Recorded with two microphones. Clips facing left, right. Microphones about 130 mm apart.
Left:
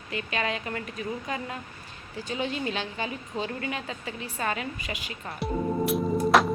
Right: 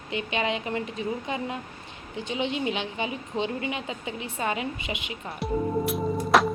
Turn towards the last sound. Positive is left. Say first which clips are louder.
# even
turn(degrees=0)  # may be behind; listen again after turning